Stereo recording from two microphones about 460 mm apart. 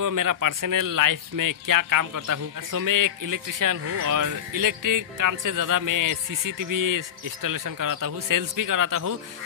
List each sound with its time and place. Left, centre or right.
0.0 s speech: right